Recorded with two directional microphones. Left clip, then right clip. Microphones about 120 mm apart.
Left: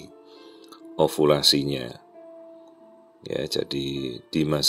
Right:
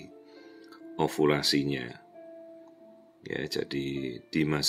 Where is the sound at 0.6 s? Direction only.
25° left (ahead or behind).